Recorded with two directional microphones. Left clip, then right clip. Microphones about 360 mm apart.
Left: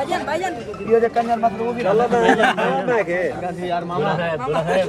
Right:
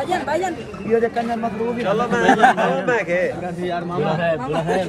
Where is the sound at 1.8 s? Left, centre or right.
Centre.